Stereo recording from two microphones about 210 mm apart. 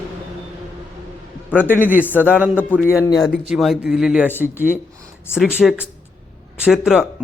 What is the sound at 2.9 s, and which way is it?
Speech, 15° left (ahead or behind).